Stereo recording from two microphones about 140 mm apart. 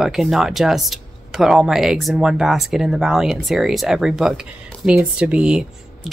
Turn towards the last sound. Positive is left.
turn(degrees=-5)  # may be behind; listen again after turning